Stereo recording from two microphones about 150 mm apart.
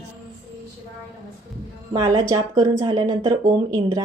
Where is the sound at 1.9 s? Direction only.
25° right (ahead or behind).